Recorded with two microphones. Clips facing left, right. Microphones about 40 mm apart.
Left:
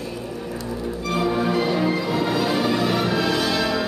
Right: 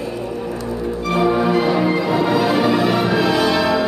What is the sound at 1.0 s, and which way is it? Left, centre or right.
Music, centre.